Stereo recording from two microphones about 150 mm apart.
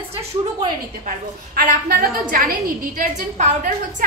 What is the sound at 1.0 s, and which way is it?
A woman's voice, 80° right.